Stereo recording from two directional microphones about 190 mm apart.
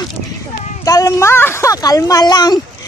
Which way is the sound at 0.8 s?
15° left (ahead or behind).